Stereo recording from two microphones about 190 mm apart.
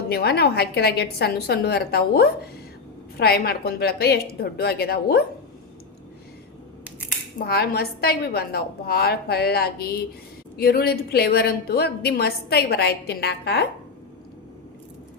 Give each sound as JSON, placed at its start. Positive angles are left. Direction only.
{"t": 0.1, "sound": "a woman's voice", "side_deg": 60}
{"t": 7.4, "sound": "a woman's voice", "side_deg": 55}